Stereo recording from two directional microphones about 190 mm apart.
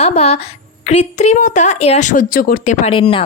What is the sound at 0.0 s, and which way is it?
A woman's voice, 35° left (ahead or behind).